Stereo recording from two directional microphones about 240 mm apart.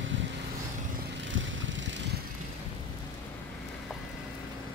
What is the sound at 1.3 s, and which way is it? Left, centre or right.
Vehicle, right.